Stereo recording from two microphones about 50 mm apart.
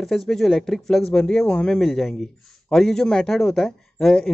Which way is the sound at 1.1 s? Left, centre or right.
Left.